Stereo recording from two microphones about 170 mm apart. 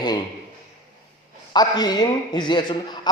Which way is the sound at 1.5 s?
25° left (ahead or behind).